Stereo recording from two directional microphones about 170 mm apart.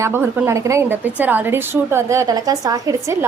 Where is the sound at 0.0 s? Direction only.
15° right (ahead or behind).